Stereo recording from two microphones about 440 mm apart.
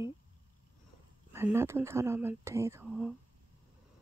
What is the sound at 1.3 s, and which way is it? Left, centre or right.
Speech, centre.